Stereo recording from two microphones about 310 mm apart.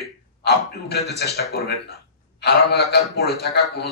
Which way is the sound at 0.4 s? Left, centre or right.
Left.